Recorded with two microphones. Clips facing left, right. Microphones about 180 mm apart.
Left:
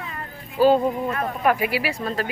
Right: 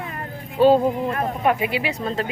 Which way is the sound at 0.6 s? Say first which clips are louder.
Right 2 dB; 25° right (ahead or behind).